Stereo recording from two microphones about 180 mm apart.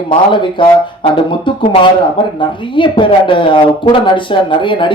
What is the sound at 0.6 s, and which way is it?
Speech, 25° left (ahead or behind).